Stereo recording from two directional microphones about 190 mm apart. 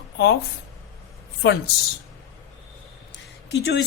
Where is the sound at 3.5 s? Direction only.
70° left (ahead or behind).